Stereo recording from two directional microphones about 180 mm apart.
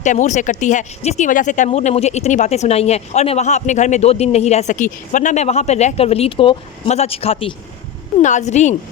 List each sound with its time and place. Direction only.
0.0 s speech: 45° left (ahead or behind)